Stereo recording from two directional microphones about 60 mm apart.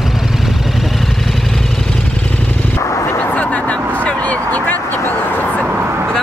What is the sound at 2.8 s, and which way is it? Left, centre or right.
Artillery fire, left.